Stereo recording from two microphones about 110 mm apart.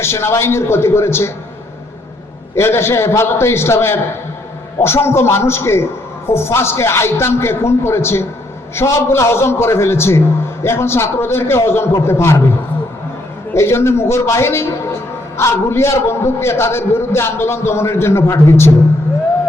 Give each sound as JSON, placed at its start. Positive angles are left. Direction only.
{"t": 0.0, "sound": "a man's voice", "side_deg": 25}
{"t": 2.6, "sound": "a man's voice", "side_deg": 20}
{"t": 13.5, "sound": "a man's voice", "side_deg": 25}